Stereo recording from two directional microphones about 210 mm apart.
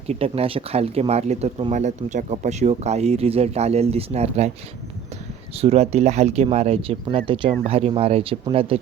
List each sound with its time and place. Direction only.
0.1 s speech: 30° right (ahead or behind)
5.5 s speech: 30° right (ahead or behind)